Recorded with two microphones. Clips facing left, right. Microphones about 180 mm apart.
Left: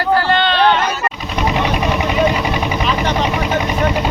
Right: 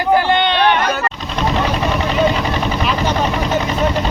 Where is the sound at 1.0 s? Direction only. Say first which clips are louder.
Left 1 dB; 10° left (ahead or behind).